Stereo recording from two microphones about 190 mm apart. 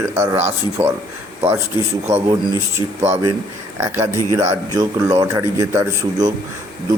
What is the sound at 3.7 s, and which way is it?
A man's voice, 15° right (ahead or behind).